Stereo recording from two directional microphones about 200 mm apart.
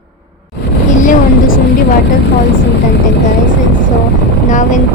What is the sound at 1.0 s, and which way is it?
Vehicle, 40° left (ahead or behind).